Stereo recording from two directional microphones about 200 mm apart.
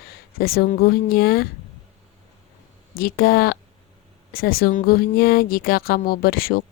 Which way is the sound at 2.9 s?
45° left (ahead or behind).